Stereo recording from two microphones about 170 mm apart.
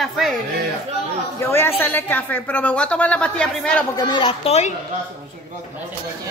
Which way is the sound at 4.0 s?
25° left (ahead or behind).